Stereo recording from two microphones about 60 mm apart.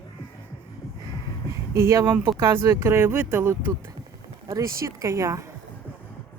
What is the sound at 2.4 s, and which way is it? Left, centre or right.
Speech, right.